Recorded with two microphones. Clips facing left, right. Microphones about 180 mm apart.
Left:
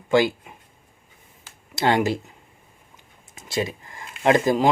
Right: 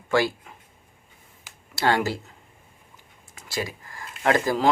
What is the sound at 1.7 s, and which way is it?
Speech, 20° left (ahead or behind).